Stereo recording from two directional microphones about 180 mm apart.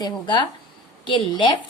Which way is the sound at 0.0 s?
25° left (ahead or behind).